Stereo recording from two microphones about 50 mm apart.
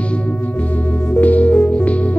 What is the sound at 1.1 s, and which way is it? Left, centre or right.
Music, left.